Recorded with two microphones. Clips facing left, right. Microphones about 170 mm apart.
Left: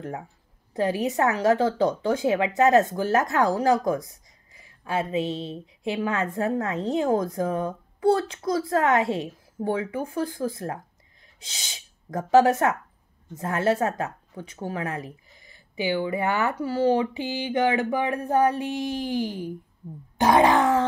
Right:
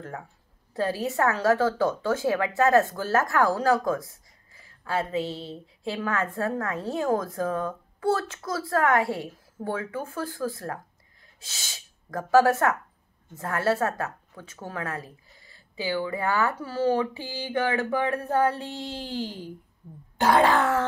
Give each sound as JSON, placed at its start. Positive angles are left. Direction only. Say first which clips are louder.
{"t": 0.7, "sound": "a woman's voice", "louder": "left 2 dB", "side_deg": 20}